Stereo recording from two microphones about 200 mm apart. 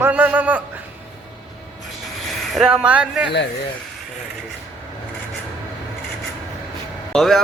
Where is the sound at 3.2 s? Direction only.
60° left (ahead or behind).